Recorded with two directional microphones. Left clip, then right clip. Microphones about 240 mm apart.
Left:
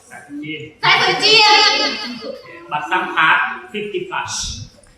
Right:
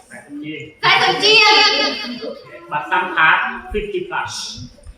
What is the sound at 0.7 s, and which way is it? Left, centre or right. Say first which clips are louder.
Speech: even; centre.